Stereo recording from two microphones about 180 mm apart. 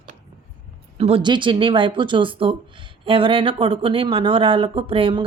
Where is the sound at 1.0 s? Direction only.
30° right (ahead or behind).